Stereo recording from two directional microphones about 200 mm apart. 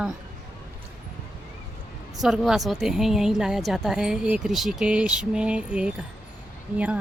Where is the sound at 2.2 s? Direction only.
Centre (ahead or behind).